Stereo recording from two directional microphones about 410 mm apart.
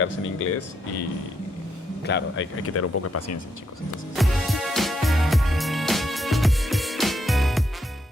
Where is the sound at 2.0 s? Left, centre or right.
Left.